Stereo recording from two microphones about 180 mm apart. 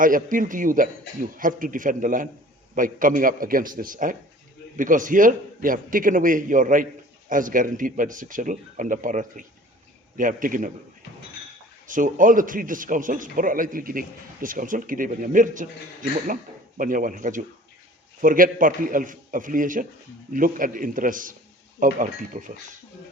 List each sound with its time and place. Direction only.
0.0 s a man's voice: 50° right (ahead or behind)
11.9 s a man's voice: 45° right (ahead or behind)